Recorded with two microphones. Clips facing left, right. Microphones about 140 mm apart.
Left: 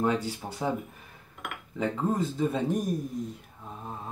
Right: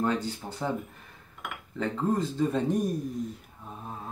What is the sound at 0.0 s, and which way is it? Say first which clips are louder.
Speech: left 1 dB; 10° left (ahead or behind).